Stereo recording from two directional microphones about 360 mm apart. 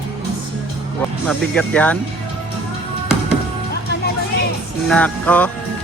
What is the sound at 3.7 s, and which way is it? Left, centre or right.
Music, left.